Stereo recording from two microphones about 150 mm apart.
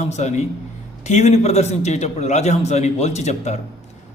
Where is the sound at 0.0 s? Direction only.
50° left (ahead or behind).